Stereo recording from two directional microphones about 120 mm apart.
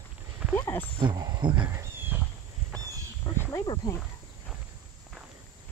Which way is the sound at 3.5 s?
30° left (ahead or behind).